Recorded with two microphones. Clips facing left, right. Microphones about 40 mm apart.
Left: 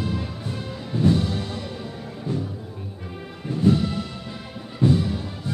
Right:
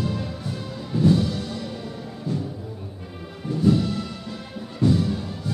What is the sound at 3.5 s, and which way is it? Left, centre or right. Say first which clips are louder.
Music: right 1 dB; left.